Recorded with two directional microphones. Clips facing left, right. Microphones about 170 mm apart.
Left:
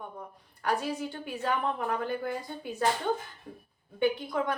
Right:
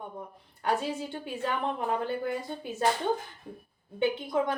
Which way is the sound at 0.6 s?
25° right (ahead or behind).